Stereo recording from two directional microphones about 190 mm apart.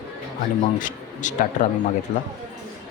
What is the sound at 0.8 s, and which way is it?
Speech, 40° left (ahead or behind).